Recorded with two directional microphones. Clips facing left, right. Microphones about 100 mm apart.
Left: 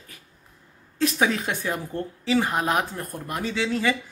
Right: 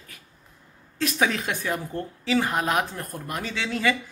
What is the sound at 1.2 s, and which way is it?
A man's voice, 20° left (ahead or behind).